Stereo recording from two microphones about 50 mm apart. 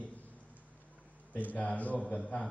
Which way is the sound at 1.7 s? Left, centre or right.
Left.